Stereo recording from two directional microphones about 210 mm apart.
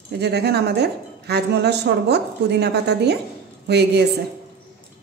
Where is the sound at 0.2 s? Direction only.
50° right (ahead or behind).